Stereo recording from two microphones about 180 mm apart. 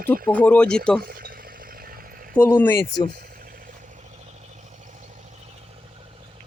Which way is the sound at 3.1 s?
50° right (ahead or behind).